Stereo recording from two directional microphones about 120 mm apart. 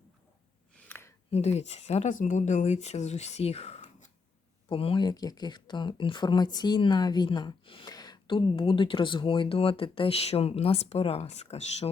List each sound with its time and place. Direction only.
0.9 s a sound: 20° left (ahead or behind)
1.3 s speech: 65° left (ahead or behind)
4.7 s speech: 50° left (ahead or behind)
5.0 s speech: 35° left (ahead or behind)
7.9 s a sound: 35° left (ahead or behind)
8.5 s speech: 45° left (ahead or behind); by 11.9 s 60° left (ahead or behind)